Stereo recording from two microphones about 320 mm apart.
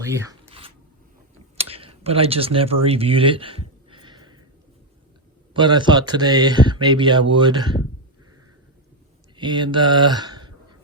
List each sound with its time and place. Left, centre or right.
0.0 s zipper: centre
1.7 s speech: centre
5.5 s speech: centre
9.3 s a sound: centre